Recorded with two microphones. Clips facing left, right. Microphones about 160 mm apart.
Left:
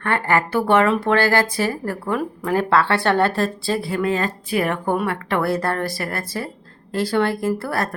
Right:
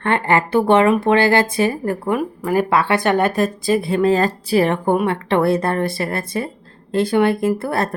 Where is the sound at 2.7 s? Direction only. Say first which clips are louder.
Left 1 dB; 15° right (ahead or behind).